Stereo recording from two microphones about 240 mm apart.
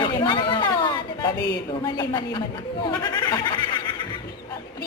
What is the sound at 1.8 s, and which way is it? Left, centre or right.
A woman's voice, centre.